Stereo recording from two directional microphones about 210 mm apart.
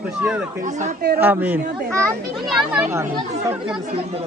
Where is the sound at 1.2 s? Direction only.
10° right (ahead or behind).